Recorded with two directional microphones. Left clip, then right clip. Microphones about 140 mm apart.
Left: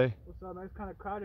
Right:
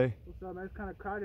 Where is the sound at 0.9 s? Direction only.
10° right (ahead or behind).